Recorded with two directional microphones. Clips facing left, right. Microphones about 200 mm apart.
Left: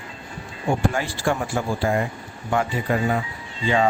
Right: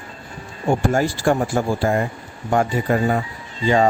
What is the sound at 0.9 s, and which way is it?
Speech, 40° right (ahead or behind).